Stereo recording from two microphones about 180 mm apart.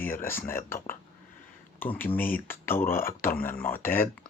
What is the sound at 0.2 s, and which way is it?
Speech, 10° left (ahead or behind).